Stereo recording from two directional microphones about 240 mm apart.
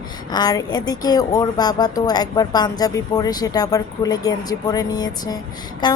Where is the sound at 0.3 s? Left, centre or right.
Centre.